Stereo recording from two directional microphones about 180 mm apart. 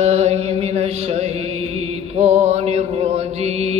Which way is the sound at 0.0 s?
35° right (ahead or behind).